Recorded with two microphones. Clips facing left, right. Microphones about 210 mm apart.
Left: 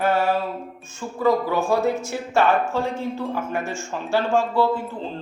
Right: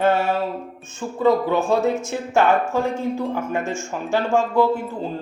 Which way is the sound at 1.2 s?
20° right (ahead or behind).